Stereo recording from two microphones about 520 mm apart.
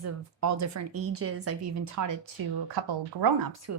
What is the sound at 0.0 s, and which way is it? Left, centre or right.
A woman's voice, right.